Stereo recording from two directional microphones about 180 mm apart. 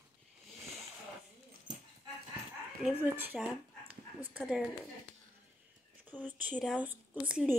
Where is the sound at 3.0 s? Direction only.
10° right (ahead or behind).